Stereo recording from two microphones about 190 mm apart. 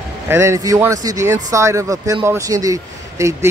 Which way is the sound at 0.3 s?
15° right (ahead or behind).